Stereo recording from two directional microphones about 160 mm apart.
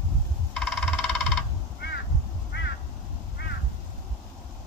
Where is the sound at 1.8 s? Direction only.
90° left.